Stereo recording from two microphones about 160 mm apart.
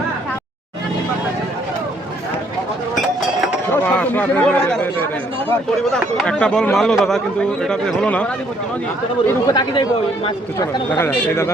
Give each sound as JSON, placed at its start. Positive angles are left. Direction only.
{"t": 3.7, "sound": "a sound", "side_deg": 10}
{"t": 5.5, "sound": "speech", "side_deg": 5}
{"t": 9.2, "sound": "speech", "side_deg": 25}